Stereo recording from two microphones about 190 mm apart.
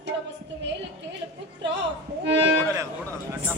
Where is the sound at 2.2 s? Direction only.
65° right (ahead or behind).